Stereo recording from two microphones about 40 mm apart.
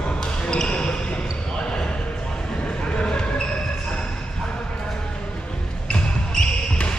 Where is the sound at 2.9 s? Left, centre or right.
Left.